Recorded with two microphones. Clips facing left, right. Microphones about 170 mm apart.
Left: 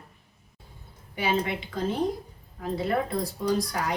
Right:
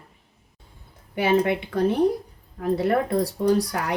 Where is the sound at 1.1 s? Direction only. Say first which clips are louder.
Right 7 dB; 60° right (ahead or behind).